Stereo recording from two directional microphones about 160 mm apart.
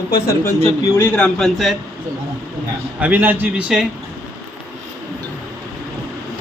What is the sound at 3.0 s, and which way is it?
Speech, 10° right (ahead or behind).